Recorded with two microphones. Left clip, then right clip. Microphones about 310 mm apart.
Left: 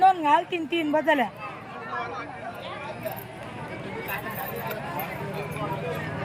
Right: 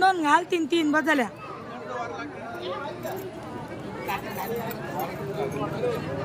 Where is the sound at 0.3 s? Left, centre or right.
Right.